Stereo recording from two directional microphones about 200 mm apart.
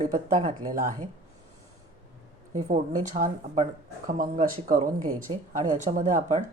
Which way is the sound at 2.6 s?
35° right (ahead or behind).